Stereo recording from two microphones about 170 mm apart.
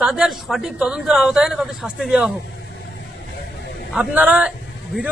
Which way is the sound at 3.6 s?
90° left.